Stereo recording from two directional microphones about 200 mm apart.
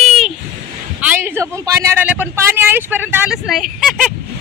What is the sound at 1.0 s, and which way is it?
Speech, 10° right (ahead or behind).